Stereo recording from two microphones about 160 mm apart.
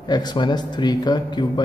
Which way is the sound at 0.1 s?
25° left (ahead or behind).